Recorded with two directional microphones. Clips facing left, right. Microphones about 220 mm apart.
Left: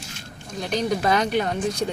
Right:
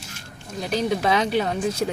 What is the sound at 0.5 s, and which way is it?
Speech, 5° right (ahead or behind).